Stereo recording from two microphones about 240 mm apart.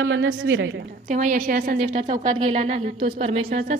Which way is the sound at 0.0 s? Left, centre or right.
Right.